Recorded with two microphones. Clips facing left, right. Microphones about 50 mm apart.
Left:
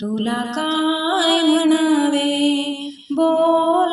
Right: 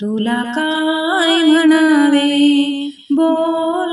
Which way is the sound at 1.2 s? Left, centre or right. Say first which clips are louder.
Right 5 dB; right.